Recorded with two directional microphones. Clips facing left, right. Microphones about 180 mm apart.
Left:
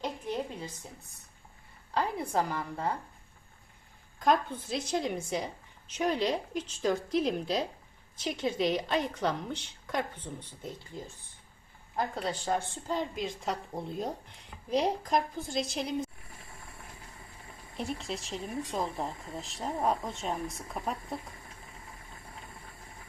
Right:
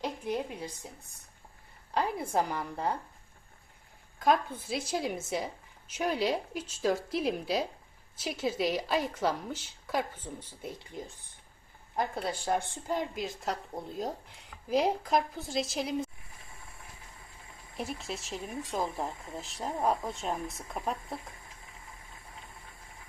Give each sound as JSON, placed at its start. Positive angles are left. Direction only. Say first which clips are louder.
{"t": 0.0, "sound": "a woman's voice", "louder": "right 1 dB", "side_deg": -10}
{"t": 1.9, "sound": "speech", "louder": "even", "side_deg": -10}
{"t": 4.2, "sound": "a woman's voice", "louder": "even", "side_deg": -5}
{"t": 17.7, "sound": "a woman's voice", "louder": "left 1 dB", "side_deg": -5}